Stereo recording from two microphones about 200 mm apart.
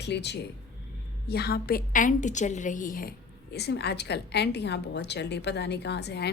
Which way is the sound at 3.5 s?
55° left (ahead or behind).